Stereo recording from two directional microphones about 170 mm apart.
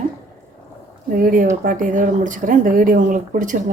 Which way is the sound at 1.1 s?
55° right (ahead or behind).